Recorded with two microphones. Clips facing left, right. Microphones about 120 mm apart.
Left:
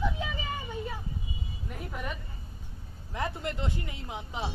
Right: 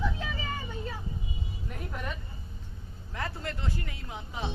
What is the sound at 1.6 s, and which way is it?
Music, 5° left (ahead or behind).